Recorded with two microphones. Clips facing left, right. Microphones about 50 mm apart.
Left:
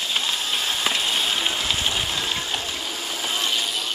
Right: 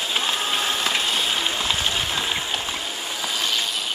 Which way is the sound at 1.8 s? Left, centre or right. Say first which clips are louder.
Right 1 dB; centre.